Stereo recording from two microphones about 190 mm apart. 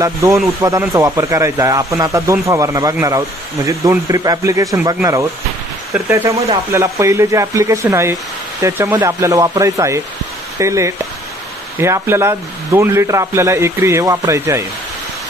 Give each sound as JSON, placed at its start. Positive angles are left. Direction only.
{"t": 0.0, "sound": "speech", "side_deg": -15}